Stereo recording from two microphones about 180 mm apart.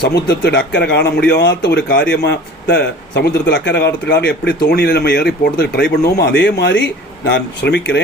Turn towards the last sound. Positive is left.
turn(degrees=75)  # may be behind; listen again after turning